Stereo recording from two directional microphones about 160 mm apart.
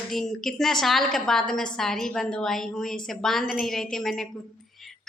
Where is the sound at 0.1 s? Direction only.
Centre (ahead or behind).